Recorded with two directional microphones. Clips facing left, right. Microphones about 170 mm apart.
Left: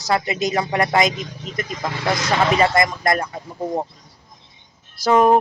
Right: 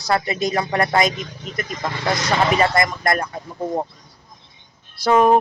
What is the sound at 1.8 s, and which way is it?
Speech, 5° left (ahead or behind).